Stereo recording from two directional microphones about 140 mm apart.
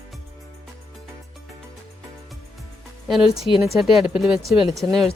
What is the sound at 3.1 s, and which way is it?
Speech, 5° right (ahead or behind).